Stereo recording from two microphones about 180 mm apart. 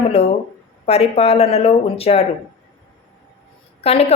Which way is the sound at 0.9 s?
35° left (ahead or behind).